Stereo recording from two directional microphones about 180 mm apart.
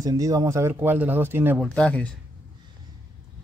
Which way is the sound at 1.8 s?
5° left (ahead or behind).